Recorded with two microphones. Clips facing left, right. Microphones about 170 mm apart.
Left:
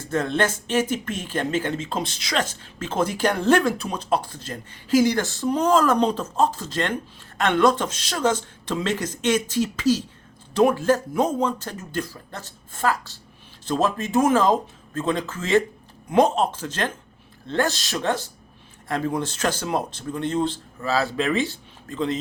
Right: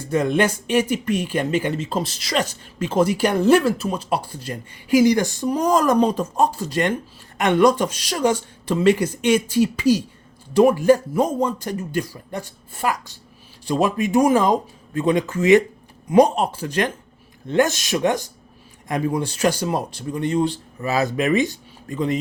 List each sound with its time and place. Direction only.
0.0 s speech: 10° right (ahead or behind)